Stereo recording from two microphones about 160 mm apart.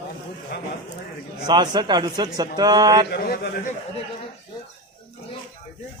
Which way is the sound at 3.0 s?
80° left.